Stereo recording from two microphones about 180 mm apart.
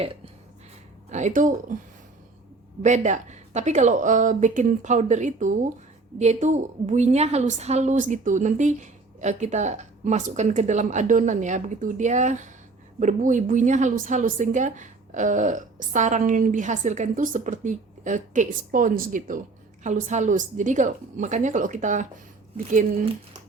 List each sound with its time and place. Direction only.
1.1 s a woman's voice: 45° right (ahead or behind)
2.8 s a woman's voice: 40° right (ahead or behind)